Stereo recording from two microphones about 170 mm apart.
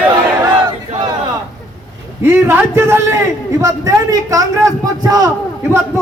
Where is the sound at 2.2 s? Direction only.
15° right (ahead or behind).